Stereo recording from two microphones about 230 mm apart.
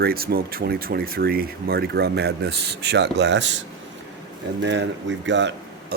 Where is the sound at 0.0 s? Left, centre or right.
Right.